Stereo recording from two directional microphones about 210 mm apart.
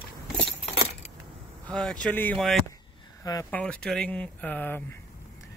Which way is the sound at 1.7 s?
5° left (ahead or behind).